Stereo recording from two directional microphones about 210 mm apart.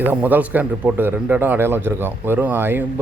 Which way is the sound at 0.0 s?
10° right (ahead or behind).